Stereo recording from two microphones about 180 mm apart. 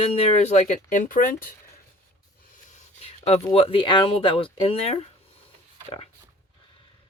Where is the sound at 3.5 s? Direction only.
30° left (ahead or behind).